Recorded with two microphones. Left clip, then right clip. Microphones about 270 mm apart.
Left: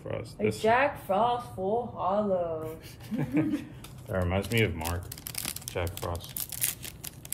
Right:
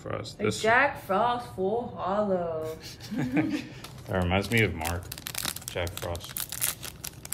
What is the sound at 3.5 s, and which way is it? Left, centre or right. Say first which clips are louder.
Speech: right 1 dB; right.